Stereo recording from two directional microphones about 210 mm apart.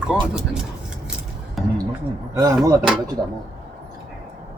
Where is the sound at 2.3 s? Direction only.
15° right (ahead or behind).